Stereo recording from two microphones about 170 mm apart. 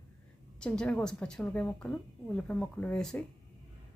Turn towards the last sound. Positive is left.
turn(degrees=5)  # may be behind; listen again after turning